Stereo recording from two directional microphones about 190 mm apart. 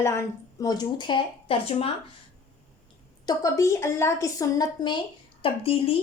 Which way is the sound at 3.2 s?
15° left (ahead or behind).